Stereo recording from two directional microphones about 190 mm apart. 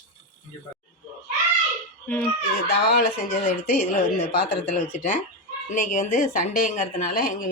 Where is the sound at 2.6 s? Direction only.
50° left (ahead or behind).